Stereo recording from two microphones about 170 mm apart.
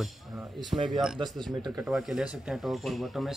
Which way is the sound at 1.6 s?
15° right (ahead or behind).